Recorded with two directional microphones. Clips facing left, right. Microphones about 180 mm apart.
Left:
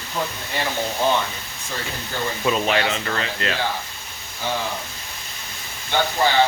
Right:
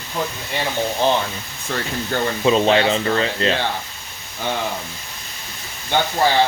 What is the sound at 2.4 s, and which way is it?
Speech, 25° right (ahead or behind).